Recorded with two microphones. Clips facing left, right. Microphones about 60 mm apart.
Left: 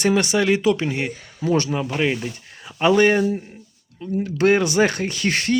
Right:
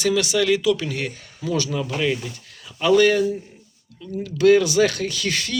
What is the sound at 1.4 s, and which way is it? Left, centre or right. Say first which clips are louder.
Speech: left 3 dB; left.